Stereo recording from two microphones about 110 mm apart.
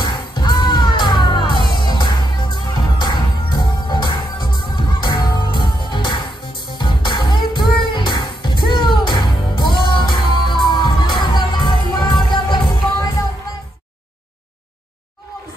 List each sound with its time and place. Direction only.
0.0 s music: 45° left (ahead or behind)